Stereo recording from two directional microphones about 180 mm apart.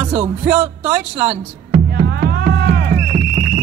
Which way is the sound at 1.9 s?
70° right (ahead or behind).